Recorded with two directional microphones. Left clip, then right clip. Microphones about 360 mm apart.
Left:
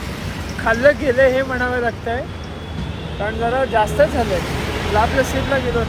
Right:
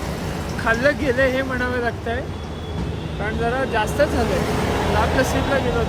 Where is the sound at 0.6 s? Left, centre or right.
Centre.